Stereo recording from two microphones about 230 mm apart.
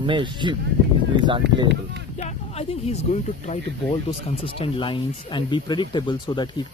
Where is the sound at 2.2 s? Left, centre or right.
Left.